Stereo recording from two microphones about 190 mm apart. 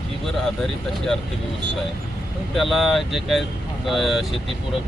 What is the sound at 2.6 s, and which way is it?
Speech, centre (ahead or behind).